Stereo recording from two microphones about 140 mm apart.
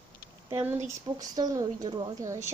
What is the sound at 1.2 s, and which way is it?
Speech, 25° right (ahead or behind).